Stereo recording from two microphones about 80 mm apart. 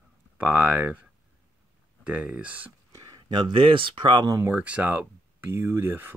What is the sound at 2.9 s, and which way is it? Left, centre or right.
Speech, right.